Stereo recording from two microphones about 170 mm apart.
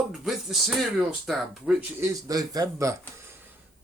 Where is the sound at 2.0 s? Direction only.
20° right (ahead or behind).